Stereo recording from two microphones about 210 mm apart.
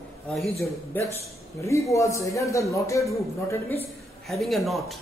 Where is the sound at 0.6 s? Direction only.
15° left (ahead or behind).